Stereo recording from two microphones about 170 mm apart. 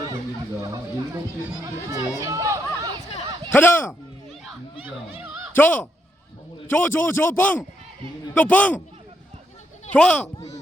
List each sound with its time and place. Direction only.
0.6 s speech: 20° right (ahead or behind)
3.5 s a man's voice: 10° left (ahead or behind)
5.2 s a sound: 5° right (ahead or behind)
5.5 s a man's voice: 10° left (ahead or behind)
9.9 s a man's voice: 5° left (ahead or behind)